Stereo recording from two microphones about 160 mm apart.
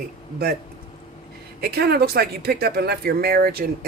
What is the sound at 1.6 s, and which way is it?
Speech, 80° right.